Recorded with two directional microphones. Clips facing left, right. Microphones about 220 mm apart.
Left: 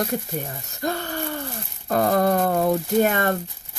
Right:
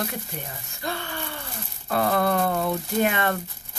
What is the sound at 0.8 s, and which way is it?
Speech, 45° left (ahead or behind).